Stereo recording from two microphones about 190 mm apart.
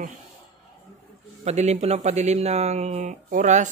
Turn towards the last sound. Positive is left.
turn(degrees=-40)  # may be behind; listen again after turning